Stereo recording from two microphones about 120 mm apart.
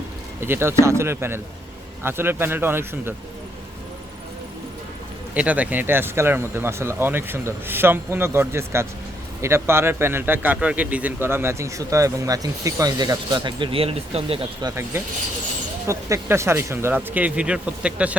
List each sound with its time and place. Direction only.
0.3 s a man's voice: 20° right (ahead or behind)
5.3 s a man's voice: 10° right (ahead or behind); by 14.4 s 55° right (ahead or behind)
15.9 s speech: 25° right (ahead or behind)